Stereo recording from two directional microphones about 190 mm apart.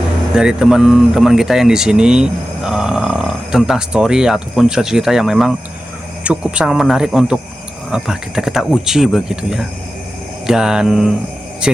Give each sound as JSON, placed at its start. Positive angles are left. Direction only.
{"t": 0.3, "sound": "speech", "side_deg": -5}